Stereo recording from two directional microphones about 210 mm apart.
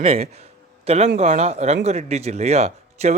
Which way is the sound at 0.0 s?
30° right (ahead or behind).